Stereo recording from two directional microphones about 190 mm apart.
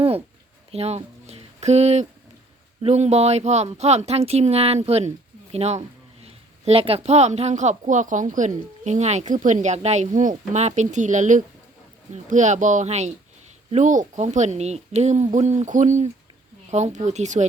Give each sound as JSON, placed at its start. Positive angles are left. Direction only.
{"t": 0.7, "sound": "a woman's voice", "side_deg": -35}